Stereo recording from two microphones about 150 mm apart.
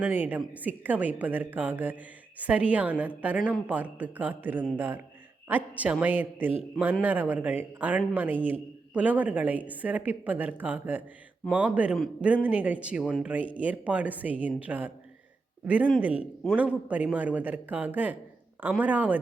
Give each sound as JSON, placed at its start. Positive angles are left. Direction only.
{"t": 0.0, "sound": "a man's voice", "side_deg": -10}